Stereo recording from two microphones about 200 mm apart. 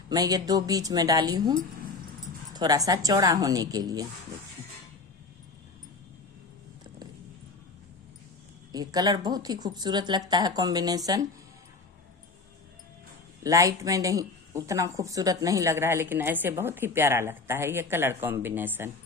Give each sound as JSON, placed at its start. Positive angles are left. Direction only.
{"t": 0.1, "sound": "a woman's voice", "side_deg": -20}
{"t": 8.7, "sound": "speech", "side_deg": -20}
{"t": 13.4, "sound": "a woman's voice", "side_deg": -15}